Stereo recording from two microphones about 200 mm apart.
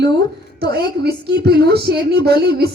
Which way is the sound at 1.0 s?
50° right (ahead or behind).